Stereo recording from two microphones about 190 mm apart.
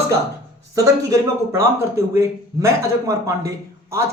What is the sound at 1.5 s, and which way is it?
Speech, 15° right (ahead or behind).